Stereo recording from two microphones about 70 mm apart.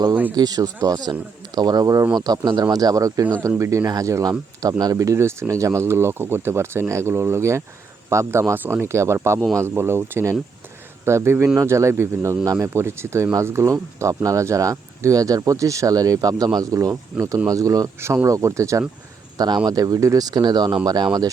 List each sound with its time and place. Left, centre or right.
0.3 s speech: right
3.6 s speech: right
3.8 s speech: right
8.5 s speech: right
18.0 s speech: right
19.4 s speech: right